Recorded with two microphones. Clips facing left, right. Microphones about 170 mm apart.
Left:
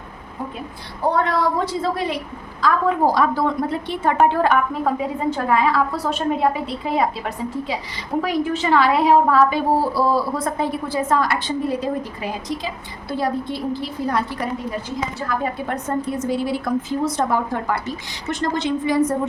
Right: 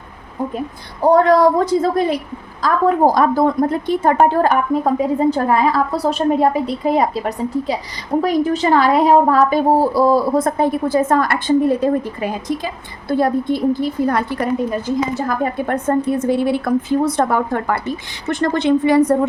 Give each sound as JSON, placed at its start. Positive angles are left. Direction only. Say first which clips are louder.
{"t": 1.1, "sound": "a woman's voice", "louder": "right 10 dB", "side_deg": -40}